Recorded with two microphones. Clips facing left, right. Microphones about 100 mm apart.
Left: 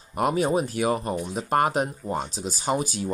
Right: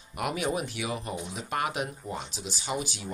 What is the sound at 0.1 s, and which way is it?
Speech, 40° left (ahead or behind).